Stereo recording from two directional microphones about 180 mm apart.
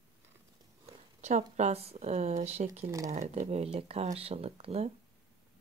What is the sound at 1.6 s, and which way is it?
Speech, 35° right (ahead or behind).